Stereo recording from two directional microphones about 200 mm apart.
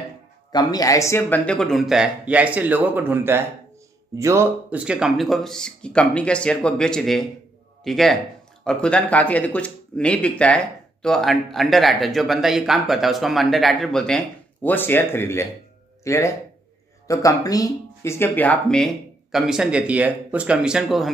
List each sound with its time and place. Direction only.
0.5 s speech: 20° left (ahead or behind); by 21.1 s 5° right (ahead or behind)